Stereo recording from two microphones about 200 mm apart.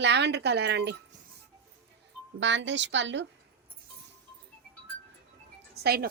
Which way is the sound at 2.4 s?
65° right (ahead or behind).